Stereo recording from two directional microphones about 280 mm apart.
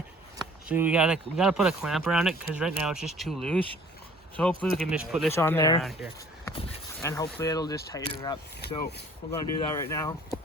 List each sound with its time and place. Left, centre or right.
0.7 s speech: centre
5.3 s speech: centre
5.8 s speech: centre
7.0 s speech: centre
9.4 s speech: centre